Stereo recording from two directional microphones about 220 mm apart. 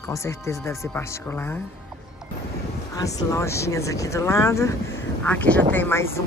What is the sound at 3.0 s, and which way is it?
Speech, 15° left (ahead or behind).